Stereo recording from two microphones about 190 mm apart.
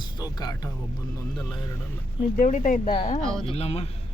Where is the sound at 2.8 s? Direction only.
30° left (ahead or behind).